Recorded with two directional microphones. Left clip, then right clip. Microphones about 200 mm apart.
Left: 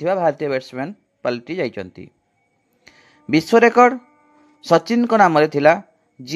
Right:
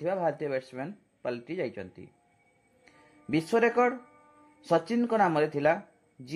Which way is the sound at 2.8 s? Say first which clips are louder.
Left 9 dB; 35° left (ahead or behind).